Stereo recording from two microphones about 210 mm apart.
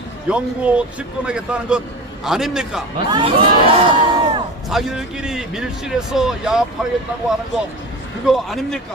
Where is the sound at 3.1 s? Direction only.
25° right (ahead or behind).